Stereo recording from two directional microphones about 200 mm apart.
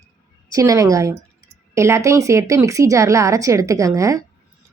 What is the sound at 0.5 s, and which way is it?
A woman's voice, 15° right (ahead or behind).